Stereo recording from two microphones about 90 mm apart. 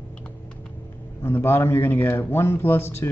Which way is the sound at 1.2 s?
25° left (ahead or behind).